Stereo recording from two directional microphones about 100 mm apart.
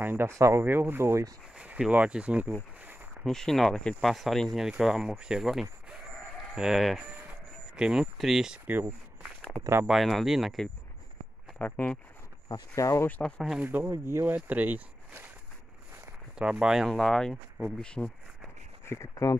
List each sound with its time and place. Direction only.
0.0 s speech: 20° right (ahead or behind)
1.5 s speech: 10° right (ahead or behind)
2.8 s a sound: 20° right (ahead or behind)
3.3 s speech: 5° left (ahead or behind)
9.5 s speech: 15° left (ahead or behind)
9.8 s speech: centre (ahead or behind)
11.5 s speech: 15° left (ahead or behind)
12.4 s speech: 40° left (ahead or behind)
13.2 s speech: centre (ahead or behind)
13.6 s speech: 20° right (ahead or behind)
16.3 s speech: 5° right (ahead or behind); by 18.1 s 10° left (ahead or behind)
18.9 s speech: 30° left (ahead or behind)